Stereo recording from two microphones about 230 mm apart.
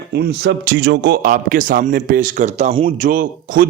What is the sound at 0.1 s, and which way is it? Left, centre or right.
A man's voice, right.